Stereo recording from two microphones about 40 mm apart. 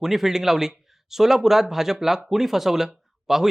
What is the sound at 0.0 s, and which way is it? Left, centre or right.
Speech, centre.